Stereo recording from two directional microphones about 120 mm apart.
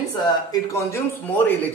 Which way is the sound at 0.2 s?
30° left (ahead or behind).